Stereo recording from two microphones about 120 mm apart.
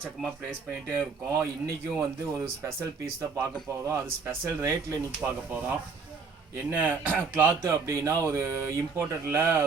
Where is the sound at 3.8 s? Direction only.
25° right (ahead or behind).